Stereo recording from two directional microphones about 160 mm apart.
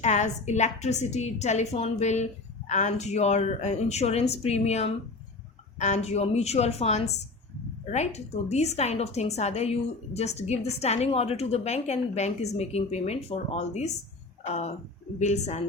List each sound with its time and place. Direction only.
0.0 s a woman's voice: 45° left (ahead or behind)